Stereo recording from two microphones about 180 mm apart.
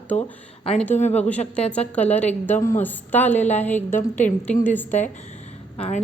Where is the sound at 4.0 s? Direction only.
40° left (ahead or behind).